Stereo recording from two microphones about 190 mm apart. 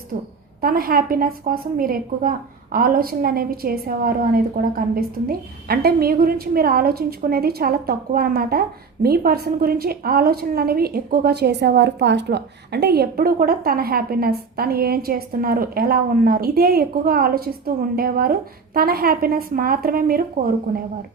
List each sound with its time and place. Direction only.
0.6 s a woman's voice: 50° right (ahead or behind)